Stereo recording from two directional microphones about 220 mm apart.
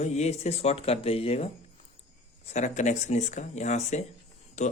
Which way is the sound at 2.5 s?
30° left (ahead or behind).